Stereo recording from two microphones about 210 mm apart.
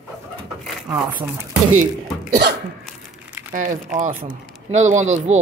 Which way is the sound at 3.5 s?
35° right (ahead or behind).